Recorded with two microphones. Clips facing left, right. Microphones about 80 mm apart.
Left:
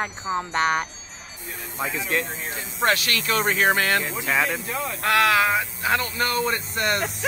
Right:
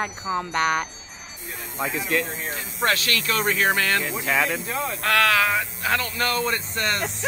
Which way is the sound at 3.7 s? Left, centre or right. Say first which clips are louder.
Left 1 dB; left.